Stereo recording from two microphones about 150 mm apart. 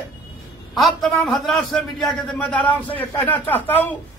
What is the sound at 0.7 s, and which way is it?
A man's voice, centre (ahead or behind).